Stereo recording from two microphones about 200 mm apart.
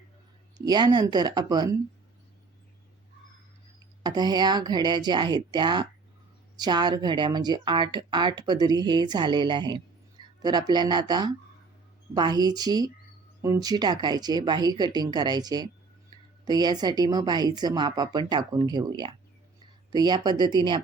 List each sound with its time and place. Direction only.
0.6 s speech: 20° right (ahead or behind)
4.0 s speech: 20° right (ahead or behind)